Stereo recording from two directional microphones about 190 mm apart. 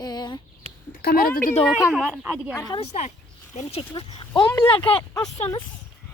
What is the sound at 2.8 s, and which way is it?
Speech, 35° left (ahead or behind).